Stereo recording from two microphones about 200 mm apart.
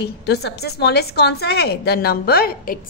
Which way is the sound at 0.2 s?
55° left (ahead or behind).